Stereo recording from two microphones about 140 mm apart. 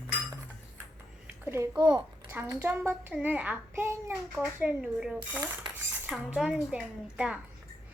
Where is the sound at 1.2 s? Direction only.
15° right (ahead or behind).